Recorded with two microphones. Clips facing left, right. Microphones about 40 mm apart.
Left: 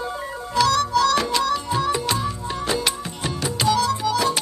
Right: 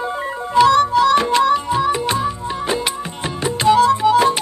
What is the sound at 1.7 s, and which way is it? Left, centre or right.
Music, right.